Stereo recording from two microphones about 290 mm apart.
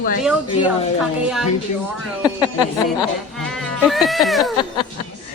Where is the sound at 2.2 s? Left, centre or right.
Centre.